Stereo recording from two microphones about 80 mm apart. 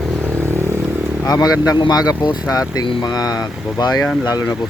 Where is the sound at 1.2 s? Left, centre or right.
Left.